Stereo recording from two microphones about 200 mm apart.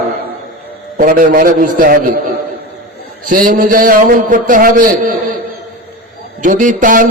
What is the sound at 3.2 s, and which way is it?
A man's voice, 40° right (ahead or behind).